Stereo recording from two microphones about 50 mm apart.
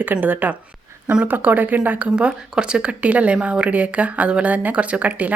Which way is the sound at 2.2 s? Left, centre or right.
Centre.